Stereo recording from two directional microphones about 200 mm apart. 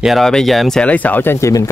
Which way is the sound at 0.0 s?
Centre (ahead or behind).